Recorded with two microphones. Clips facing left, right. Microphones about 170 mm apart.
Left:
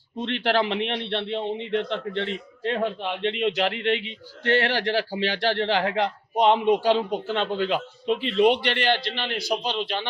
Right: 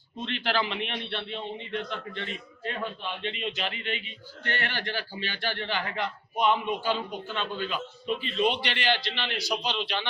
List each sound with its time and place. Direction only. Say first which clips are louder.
0.2 s a man's voice: left 6 dB; 70° left (ahead or behind)
8.6 s a man's voice: left 5 dB; 55° left (ahead or behind)